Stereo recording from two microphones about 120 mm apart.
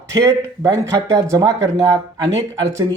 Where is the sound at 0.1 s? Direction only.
25° right (ahead or behind).